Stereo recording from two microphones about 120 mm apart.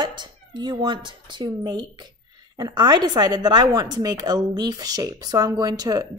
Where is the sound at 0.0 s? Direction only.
40° right (ahead or behind).